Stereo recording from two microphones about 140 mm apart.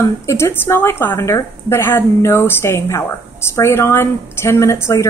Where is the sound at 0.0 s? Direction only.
20° left (ahead or behind).